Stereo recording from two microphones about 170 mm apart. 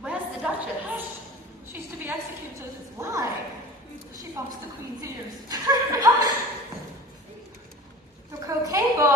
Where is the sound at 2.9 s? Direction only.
15° right (ahead or behind).